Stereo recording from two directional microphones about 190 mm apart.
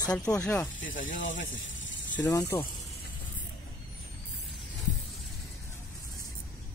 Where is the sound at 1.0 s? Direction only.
80° left.